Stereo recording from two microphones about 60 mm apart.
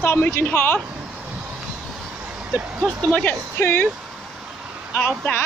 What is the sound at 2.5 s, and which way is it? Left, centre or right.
Speech, right.